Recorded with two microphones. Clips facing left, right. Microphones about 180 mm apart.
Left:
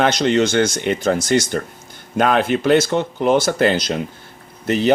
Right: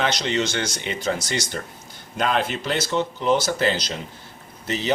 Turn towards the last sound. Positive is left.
turn(degrees=55)  # may be behind; listen again after turning